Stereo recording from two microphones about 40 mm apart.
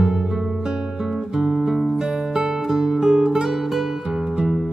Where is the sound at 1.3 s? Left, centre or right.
Centre.